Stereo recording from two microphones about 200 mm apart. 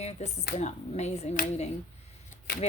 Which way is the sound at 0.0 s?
35° left (ahead or behind).